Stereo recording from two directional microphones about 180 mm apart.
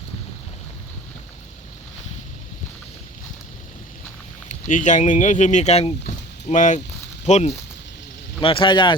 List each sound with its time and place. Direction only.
4.4 s speech: 45° left (ahead or behind)
8.4 s a man's voice: 30° left (ahead or behind)